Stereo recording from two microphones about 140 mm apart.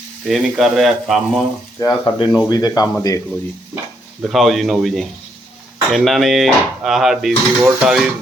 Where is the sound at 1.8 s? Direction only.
25° left (ahead or behind).